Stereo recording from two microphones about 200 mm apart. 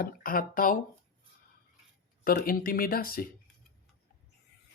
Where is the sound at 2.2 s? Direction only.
45° left (ahead or behind).